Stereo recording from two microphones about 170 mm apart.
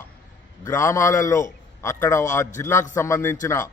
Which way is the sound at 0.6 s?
15° left (ahead or behind).